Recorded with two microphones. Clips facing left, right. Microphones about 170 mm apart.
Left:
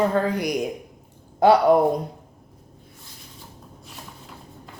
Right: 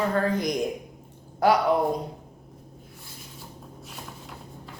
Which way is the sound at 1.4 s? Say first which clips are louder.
Left 5 dB; 25° left (ahead or behind).